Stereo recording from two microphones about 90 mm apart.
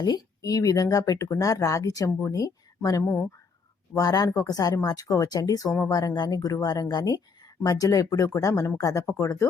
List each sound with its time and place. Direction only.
0.0 s speech: 45° left (ahead or behind)